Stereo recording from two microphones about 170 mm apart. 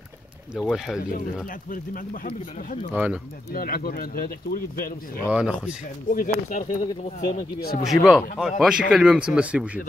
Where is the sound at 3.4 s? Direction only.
60° left (ahead or behind).